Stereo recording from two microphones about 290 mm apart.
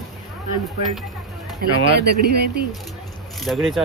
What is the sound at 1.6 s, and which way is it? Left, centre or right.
Speech, right.